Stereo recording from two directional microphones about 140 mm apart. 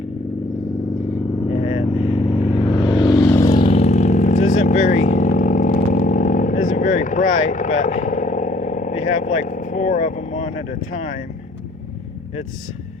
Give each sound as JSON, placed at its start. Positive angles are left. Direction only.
{"t": 1.5, "sound": "vehicle", "side_deg": 50}
{"t": 3.6, "sound": "vehicle", "side_deg": 45}